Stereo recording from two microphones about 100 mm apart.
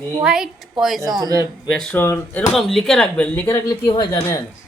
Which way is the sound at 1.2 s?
40° right (ahead or behind).